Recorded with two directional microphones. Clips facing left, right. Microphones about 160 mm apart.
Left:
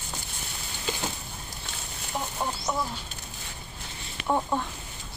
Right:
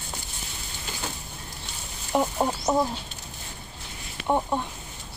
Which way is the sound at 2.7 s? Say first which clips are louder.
Right 7 dB; 30° right (ahead or behind).